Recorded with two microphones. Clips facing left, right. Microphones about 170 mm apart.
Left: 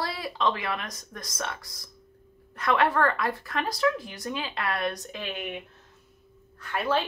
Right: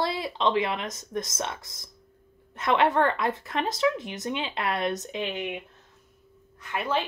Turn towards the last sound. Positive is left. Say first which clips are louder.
# left 2 dB
turn(degrees=-20)  # may be behind; listen again after turning